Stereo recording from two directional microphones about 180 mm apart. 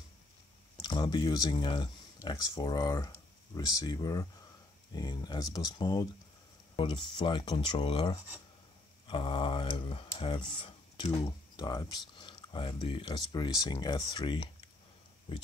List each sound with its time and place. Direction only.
0.7 s speech: 25° left (ahead or behind)